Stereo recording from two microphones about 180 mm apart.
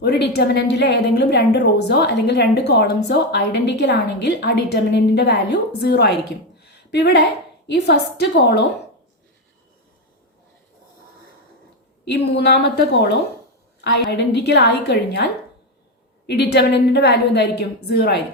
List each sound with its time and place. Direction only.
0.0 s a woman's voice: 65° left (ahead or behind)
6.6 s a sound: 65° left (ahead or behind)
7.7 s a woman's voice: 70° left (ahead or behind)
12.1 s a woman's voice: 70° left (ahead or behind)